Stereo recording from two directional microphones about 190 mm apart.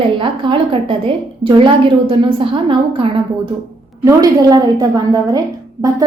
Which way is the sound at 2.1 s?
25° right (ahead or behind).